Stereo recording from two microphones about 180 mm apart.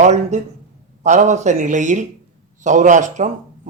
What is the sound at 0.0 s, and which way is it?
Speech, 40° right (ahead or behind).